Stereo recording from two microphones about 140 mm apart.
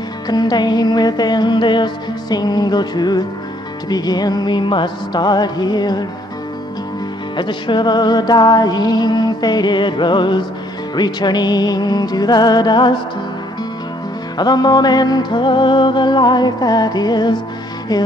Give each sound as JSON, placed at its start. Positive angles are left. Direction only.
{"t": 0.3, "sound": "music", "side_deg": 30}
{"t": 7.3, "sound": "music", "side_deg": 35}
{"t": 14.4, "sound": "music", "side_deg": 30}